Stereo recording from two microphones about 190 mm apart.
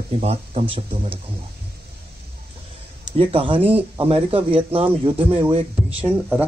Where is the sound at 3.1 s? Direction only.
30° right (ahead or behind).